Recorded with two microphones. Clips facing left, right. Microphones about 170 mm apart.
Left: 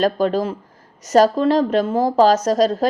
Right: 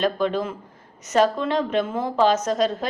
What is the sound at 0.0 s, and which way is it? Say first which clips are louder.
A woman's voice: left 4 dB; 40° left (ahead or behind).